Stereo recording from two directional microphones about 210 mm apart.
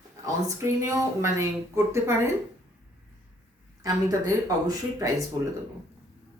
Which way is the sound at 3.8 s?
15° right (ahead or behind).